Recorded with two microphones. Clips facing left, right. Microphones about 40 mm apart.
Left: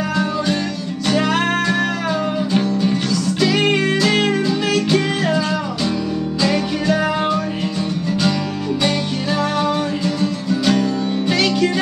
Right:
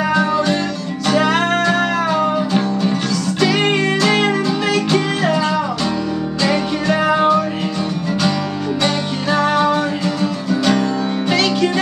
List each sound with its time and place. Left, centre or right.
0.1 s music: centre
7.1 s music: centre
8.8 s music: centre
11.2 s music: centre